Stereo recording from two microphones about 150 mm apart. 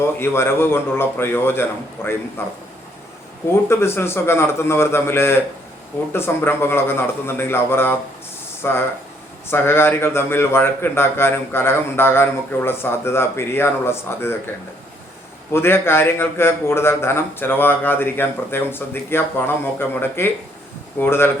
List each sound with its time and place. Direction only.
0.0 s a man's voice: 15° left (ahead or behind)
3.7 s a man's voice: 15° left (ahead or behind)
15.5 s a man's voice: 15° left (ahead or behind)